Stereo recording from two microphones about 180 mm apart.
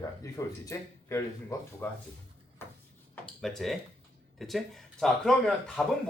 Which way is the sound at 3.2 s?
5° left (ahead or behind).